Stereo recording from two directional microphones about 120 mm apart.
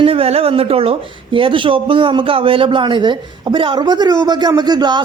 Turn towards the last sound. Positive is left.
turn(degrees=-35)  # may be behind; listen again after turning